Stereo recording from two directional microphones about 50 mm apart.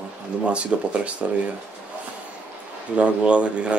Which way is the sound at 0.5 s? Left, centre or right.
Right.